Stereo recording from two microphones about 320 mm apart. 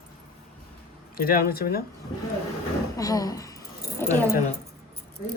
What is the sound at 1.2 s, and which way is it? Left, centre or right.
Speech, left.